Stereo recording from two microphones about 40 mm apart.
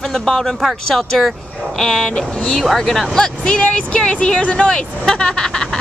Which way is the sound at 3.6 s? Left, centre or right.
Left.